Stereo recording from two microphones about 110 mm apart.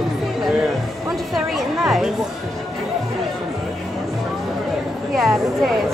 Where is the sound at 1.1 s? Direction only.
Centre (ahead or behind).